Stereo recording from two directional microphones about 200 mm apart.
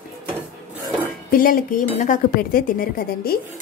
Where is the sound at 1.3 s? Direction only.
45° left (ahead or behind).